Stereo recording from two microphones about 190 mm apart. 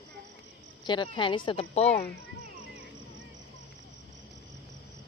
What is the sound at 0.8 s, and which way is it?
Speech, 25° left (ahead or behind).